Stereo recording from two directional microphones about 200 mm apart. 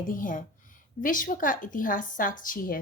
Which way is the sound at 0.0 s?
40° left (ahead or behind).